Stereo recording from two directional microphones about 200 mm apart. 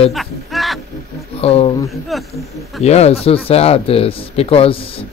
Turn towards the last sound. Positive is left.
turn(degrees=25)  # may be behind; listen again after turning